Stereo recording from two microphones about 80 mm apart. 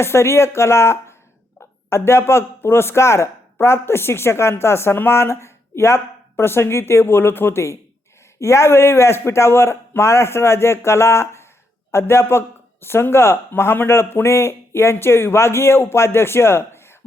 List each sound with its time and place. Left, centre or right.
0.0 s speech: left